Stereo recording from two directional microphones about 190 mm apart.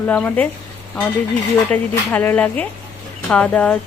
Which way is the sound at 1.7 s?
10° left (ahead or behind).